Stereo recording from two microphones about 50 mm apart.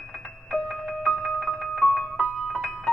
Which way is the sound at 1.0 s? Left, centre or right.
Centre.